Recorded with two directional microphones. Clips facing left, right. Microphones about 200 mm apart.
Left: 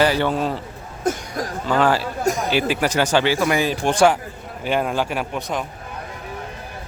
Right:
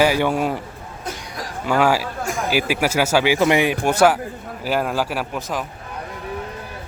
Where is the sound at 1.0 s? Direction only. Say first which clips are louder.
Left 8 dB; 50° left (ahead or behind).